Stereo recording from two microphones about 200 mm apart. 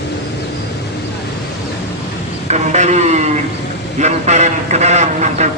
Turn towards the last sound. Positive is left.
turn(degrees=-35)  # may be behind; listen again after turning